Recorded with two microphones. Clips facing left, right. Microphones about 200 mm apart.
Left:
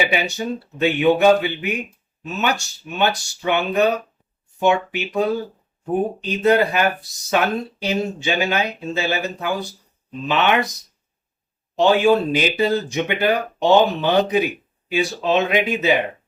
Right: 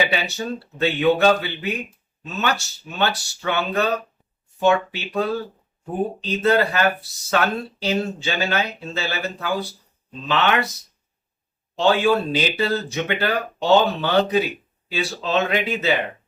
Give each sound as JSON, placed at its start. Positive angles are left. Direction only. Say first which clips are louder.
{"t": 0.0, "sound": "speech", "louder": "left 2 dB", "side_deg": 15}
{"t": 11.8, "sound": "speech", "louder": "left 3 dB", "side_deg": 15}